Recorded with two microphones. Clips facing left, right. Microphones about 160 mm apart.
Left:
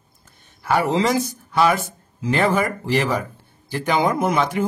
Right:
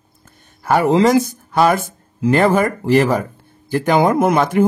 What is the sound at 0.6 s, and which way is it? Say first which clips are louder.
Speech: right 6 dB; 50° right (ahead or behind).